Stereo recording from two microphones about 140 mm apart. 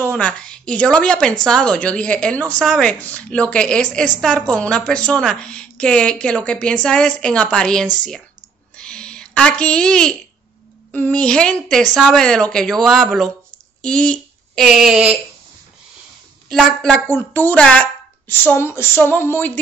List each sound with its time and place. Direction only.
0.0 s a woman's voice: 10° left (ahead or behind)
2.6 s a woman's voice: centre (ahead or behind)
2.9 s a woman's voice: 10° left (ahead or behind)
8.7 s a sound: 5° left (ahead or behind)
10.9 s a woman's voice: 10° left (ahead or behind); by 15.1 s 5° right (ahead or behind)
16.8 s a woman's voice: 10° left (ahead or behind)